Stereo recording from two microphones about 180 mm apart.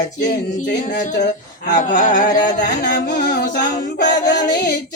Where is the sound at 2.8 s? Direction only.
55° left (ahead or behind).